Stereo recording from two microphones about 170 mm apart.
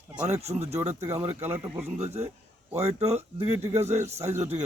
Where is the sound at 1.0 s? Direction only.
15° right (ahead or behind).